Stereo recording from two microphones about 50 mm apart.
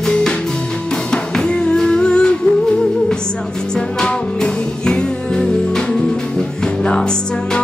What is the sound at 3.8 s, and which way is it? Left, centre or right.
Music, centre.